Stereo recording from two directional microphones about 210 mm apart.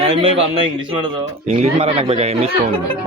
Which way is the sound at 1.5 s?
30° right (ahead or behind).